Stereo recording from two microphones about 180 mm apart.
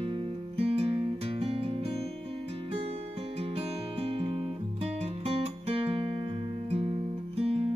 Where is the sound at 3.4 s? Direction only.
35° right (ahead or behind).